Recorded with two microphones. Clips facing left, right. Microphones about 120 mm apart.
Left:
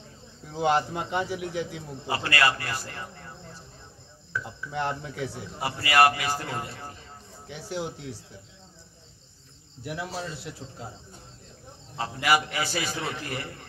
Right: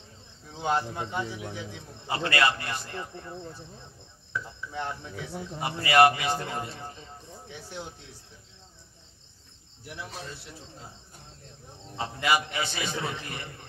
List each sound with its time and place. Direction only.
0.6 s speech: 85° left
2.0 s a man's voice: 20° right (ahead or behind)
4.3 s a man's voice: 25° right (ahead or behind)
4.7 s speech: 80° left
5.6 s a man's voice: 20° right (ahead or behind)
7.4 s speech: 85° left
9.8 s speech: 90° left
12.0 s a man's voice: 20° right (ahead or behind)